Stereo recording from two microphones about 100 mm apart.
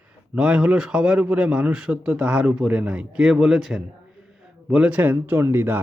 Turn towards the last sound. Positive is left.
turn(degrees=-20)  # may be behind; listen again after turning